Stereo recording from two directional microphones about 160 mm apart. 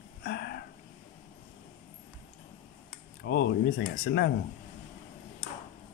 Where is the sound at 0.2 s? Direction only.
90° left.